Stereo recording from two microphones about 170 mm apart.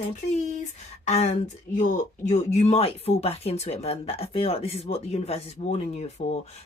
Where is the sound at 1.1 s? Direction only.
40° left (ahead or behind).